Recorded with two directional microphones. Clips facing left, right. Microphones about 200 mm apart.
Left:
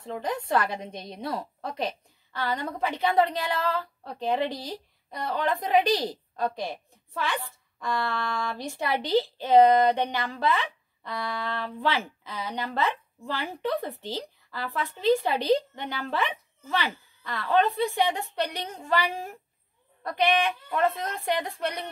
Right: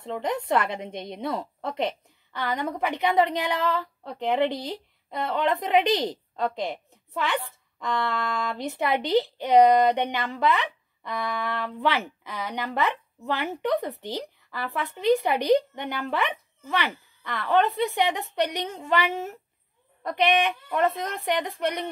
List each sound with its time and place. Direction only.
0.0 s a woman's voice: 25° right (ahead or behind)